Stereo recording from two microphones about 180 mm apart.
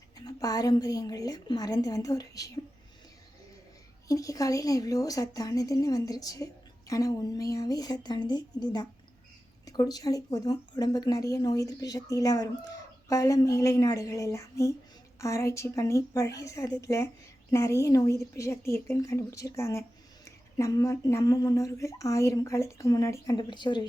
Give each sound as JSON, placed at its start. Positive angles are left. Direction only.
{"t": 0.3, "sound": "speech", "side_deg": 20}
{"t": 4.1, "sound": "speech", "side_deg": 20}